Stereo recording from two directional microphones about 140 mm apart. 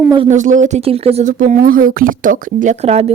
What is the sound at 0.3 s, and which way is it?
Speech, 60° right (ahead or behind).